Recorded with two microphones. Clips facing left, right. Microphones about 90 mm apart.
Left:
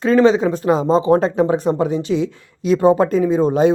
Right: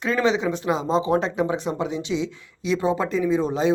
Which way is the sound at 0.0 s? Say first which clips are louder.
Left 8 dB; 35° left (ahead or behind).